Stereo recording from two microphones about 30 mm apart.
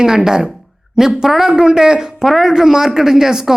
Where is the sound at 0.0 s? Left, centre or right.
Right.